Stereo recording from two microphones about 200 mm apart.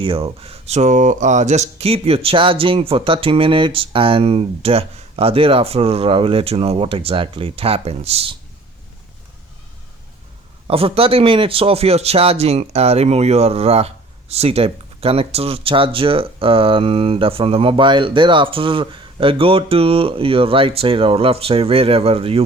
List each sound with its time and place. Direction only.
0.0 s speech: 25° right (ahead or behind)
10.7 s speech: 30° right (ahead or behind)